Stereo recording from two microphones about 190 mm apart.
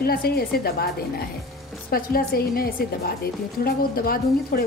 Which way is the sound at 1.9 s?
50° left (ahead or behind).